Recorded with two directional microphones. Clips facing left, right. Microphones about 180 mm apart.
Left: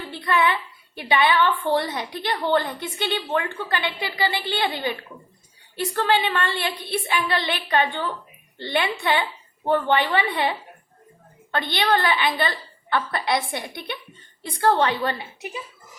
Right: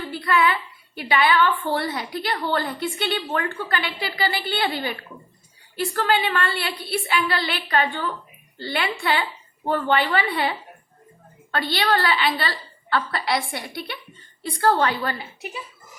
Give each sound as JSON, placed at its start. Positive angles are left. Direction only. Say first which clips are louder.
{"t": 0.1, "sound": "a woman's voice", "louder": "even", "side_deg": 20}
{"t": 11.5, "sound": "a woman's voice", "louder": "even", "side_deg": 20}